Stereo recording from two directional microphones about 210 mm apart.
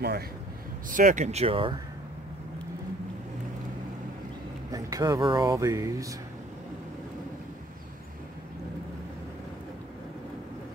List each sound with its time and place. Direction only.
0.8 s speech: 40° right (ahead or behind)
4.6 s speech: 15° right (ahead or behind)